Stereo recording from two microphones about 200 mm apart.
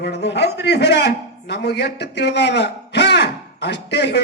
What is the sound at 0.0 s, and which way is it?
A man's voice, 60° left (ahead or behind).